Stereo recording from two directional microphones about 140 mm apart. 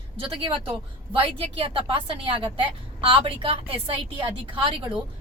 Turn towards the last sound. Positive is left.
turn(degrees=-40)  # may be behind; listen again after turning